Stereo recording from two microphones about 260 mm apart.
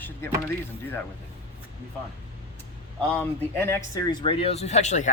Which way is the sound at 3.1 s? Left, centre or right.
Centre.